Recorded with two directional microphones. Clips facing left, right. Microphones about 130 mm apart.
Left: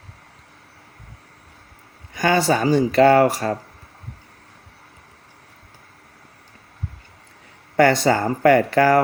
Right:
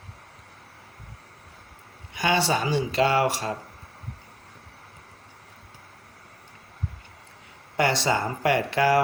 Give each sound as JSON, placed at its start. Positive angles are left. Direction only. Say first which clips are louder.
{"t": 2.1, "sound": "speech", "louder": "left 5 dB", "side_deg": 45}
{"t": 7.8, "sound": "speech", "louder": "left 7 dB", "side_deg": 45}